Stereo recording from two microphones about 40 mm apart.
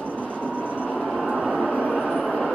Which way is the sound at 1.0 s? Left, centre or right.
Right.